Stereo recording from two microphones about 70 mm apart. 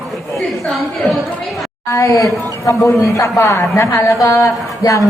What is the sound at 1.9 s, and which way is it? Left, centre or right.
Speech, left.